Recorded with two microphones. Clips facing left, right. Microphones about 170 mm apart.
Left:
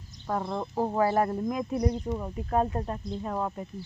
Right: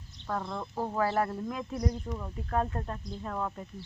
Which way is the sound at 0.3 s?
15° left (ahead or behind).